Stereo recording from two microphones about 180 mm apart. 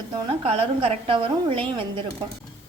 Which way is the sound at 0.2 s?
30° right (ahead or behind).